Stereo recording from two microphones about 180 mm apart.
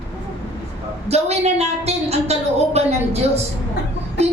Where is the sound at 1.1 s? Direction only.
35° right (ahead or behind).